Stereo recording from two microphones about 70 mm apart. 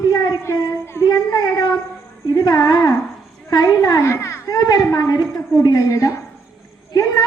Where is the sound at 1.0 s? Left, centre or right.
Left.